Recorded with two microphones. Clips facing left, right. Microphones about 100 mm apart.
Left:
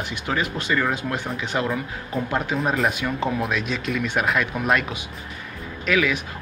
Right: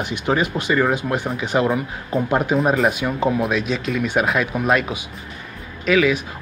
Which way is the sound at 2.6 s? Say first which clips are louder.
Right 4 dB; centre (ahead or behind).